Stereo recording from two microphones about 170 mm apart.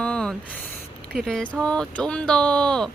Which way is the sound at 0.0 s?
5° left (ahead or behind).